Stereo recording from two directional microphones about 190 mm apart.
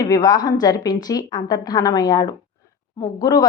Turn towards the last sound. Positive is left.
turn(degrees=20)  # may be behind; listen again after turning